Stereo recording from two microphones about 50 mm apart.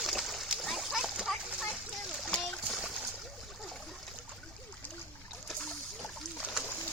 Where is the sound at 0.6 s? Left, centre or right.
Centre.